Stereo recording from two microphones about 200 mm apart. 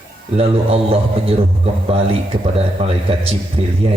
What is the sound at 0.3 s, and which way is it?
Speech, 30° right (ahead or behind).